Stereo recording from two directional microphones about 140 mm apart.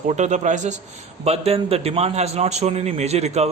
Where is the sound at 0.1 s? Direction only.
60° right (ahead or behind).